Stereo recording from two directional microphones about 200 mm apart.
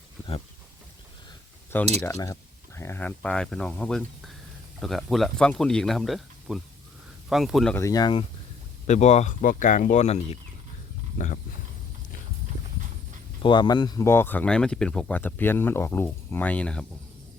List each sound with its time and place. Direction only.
2.0 s speech: 15° left (ahead or behind)
7.8 s speech: 15° left (ahead or behind)
8.9 s speech: 35° left (ahead or behind)
13.4 s speech: 25° left (ahead or behind); by 16.8 s 5° left (ahead or behind)